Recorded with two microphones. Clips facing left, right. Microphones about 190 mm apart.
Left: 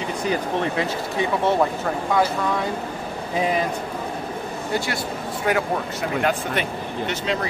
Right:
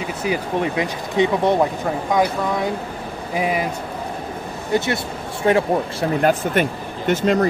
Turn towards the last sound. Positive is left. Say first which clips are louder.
# right 6 dB
turn(degrees=-50)  # may be behind; listen again after turning